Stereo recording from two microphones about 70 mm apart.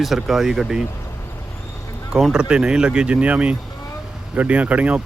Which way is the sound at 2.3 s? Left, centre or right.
Centre.